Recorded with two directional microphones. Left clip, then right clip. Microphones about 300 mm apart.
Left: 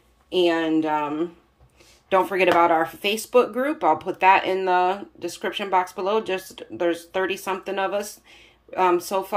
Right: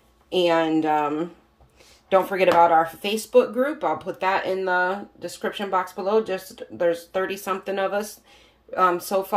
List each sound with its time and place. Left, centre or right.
0.3 s speech: centre